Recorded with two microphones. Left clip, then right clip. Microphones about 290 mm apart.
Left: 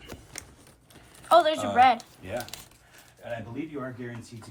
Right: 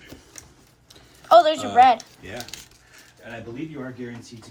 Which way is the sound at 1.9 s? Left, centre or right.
Centre.